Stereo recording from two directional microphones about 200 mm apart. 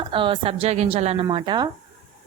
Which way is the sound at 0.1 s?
25° right (ahead or behind).